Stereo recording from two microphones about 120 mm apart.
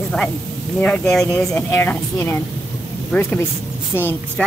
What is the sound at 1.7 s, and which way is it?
Speech, 20° left (ahead or behind).